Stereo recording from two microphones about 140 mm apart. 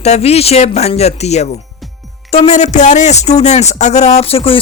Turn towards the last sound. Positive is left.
turn(degrees=40)  # may be behind; listen again after turning